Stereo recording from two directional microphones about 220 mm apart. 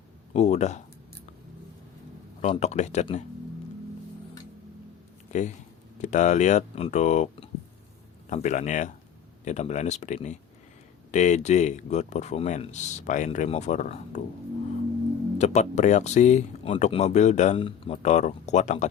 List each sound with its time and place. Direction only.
0.3 s speech: 30° left (ahead or behind)
2.4 s speech: 30° left (ahead or behind)
5.3 s speech: 35° left (ahead or behind)
15.4 s speech: 30° left (ahead or behind)